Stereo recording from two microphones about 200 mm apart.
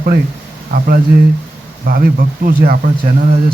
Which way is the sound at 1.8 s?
50° right (ahead or behind).